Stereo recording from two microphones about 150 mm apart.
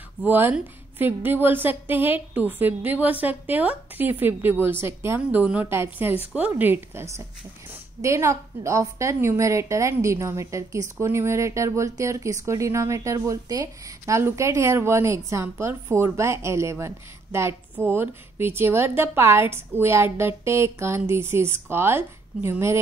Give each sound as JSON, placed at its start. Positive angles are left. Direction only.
{"t": 0.2, "sound": "a woman's voice", "side_deg": -10}